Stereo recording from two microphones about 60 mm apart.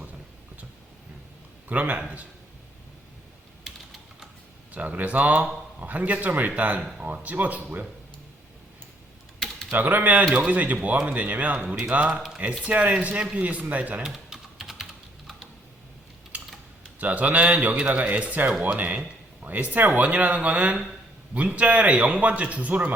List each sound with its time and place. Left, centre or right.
1.7 s speech: right
4.7 s speech: right
9.7 s speech: right
14.0 s typing: centre
17.0 s speech: right